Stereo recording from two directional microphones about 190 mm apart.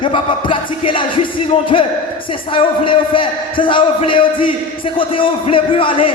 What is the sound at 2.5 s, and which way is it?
Music, 25° left (ahead or behind).